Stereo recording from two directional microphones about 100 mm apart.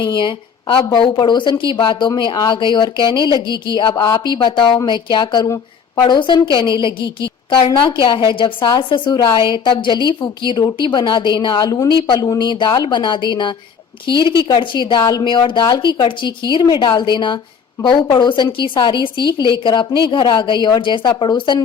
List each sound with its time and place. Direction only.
0.0 s a woman's voice: 50° left (ahead or behind)
0.9 s a woman's voice: 45° left (ahead or behind)